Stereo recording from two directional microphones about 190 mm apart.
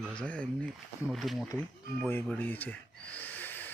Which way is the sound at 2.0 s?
10° left (ahead or behind).